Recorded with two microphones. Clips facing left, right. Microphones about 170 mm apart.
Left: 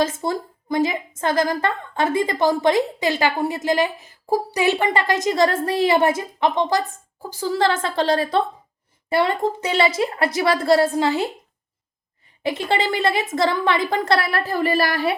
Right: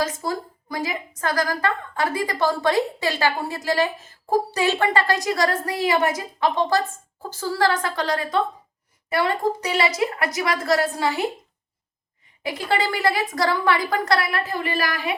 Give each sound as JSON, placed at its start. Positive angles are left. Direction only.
{"t": 0.0, "sound": "a woman's voice", "side_deg": 25}
{"t": 12.4, "sound": "a woman's voice", "side_deg": 25}